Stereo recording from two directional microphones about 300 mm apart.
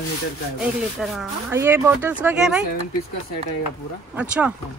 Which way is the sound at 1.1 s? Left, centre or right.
Centre.